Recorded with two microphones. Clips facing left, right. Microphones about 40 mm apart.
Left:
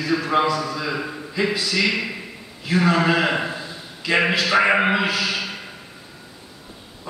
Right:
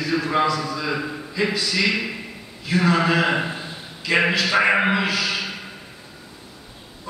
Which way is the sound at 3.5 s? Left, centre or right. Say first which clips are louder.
Left 1 dB; right.